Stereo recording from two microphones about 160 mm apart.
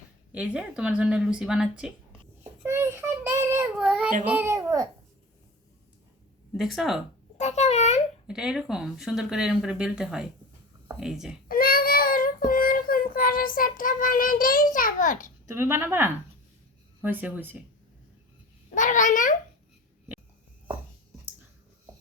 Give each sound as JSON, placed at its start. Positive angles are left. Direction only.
{"t": 0.3, "sound": "speech", "side_deg": -5}
{"t": 2.6, "sound": "a child's voice", "side_deg": -15}
{"t": 3.8, "sound": "speech", "side_deg": -5}
{"t": 6.5, "sound": "speech", "side_deg": 0}
{"t": 7.3, "sound": "a child's voice", "side_deg": 45}
{"t": 8.3, "sound": "speech", "side_deg": -5}
{"t": 11.4, "sound": "child singing", "side_deg": 65}
{"t": 15.5, "sound": "speech", "side_deg": -15}
{"t": 18.7, "sound": "a child's voice", "side_deg": 50}